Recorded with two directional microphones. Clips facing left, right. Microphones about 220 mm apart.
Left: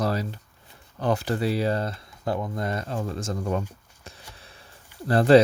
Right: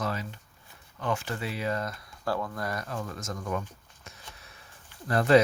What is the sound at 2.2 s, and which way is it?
Speech, 20° left (ahead or behind).